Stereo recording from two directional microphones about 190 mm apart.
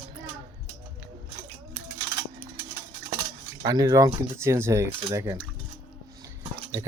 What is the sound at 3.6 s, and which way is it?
Speech, 20° right (ahead or behind).